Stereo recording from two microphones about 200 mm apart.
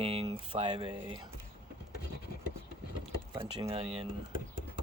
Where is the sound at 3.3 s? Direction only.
30° right (ahead or behind).